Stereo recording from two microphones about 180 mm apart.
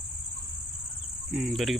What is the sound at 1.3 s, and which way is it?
Speech, centre (ahead or behind).